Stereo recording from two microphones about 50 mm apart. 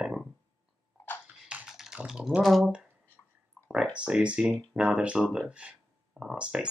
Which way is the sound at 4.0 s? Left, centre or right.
Right.